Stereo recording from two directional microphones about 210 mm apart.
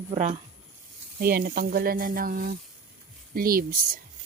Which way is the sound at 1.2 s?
45° right (ahead or behind).